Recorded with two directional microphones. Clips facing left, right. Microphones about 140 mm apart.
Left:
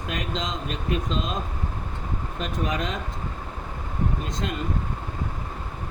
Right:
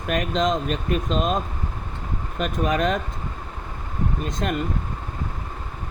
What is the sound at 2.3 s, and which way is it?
Speech, 65° right (ahead or behind).